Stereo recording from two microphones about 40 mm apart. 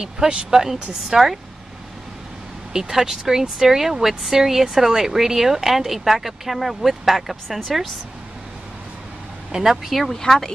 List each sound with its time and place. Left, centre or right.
0.0 s speech: centre
2.7 s speech: centre
9.5 s speech: centre
9.8 s speech: centre
10.2 s speech: centre